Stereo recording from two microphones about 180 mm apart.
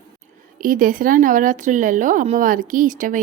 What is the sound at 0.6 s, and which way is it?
A woman's voice, 50° right (ahead or behind).